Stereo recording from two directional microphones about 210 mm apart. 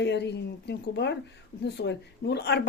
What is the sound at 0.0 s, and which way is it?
Speech, 55° left (ahead or behind).